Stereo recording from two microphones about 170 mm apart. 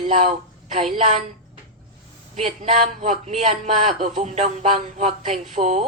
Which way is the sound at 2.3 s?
40° right (ahead or behind).